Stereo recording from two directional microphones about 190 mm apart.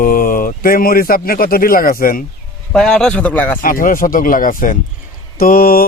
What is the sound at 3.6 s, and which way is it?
Speech, 45° left (ahead or behind).